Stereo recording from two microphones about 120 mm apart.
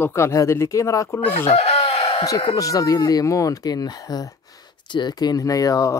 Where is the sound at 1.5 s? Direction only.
60° left (ahead or behind).